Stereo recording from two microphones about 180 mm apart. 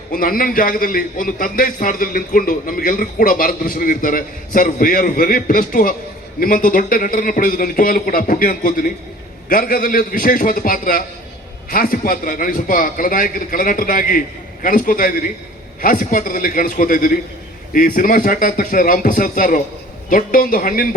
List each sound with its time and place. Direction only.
0.1 s a man's voice: 50° left (ahead or behind)